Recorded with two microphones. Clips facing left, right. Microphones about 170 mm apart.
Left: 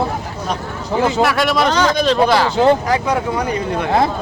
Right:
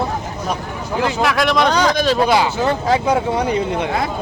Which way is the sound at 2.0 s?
10° right (ahead or behind).